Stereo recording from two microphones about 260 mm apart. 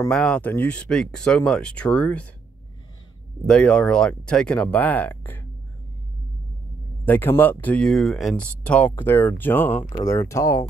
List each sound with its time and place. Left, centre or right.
0.1 s speech: centre
3.4 s speech: centre
7.1 s speech: centre
9.7 s speech: left
10.0 s speech: centre